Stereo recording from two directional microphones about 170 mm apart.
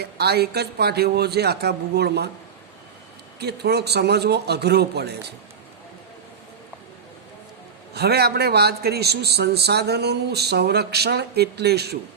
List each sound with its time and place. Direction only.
0.0 s a man's voice: 70° right (ahead or behind)
3.4 s a man's voice: 75° right (ahead or behind)
7.9 s a man's voice: 70° right (ahead or behind)